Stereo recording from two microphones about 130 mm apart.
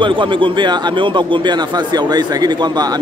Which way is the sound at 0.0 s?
40° right (ahead or behind).